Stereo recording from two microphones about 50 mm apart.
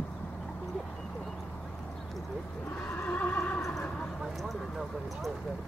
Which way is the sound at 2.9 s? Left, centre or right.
Left.